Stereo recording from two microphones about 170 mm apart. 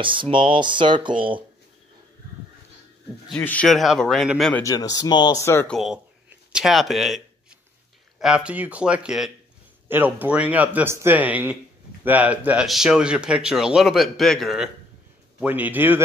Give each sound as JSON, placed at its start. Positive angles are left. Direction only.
{"t": 0.0, "sound": "speech", "side_deg": -30}
{"t": 3.3, "sound": "a man's voice", "side_deg": 10}
{"t": 4.6, "sound": "speech", "side_deg": 20}
{"t": 6.5, "sound": "a man's voice", "side_deg": 0}
{"t": 8.2, "sound": "a man's voice", "side_deg": -5}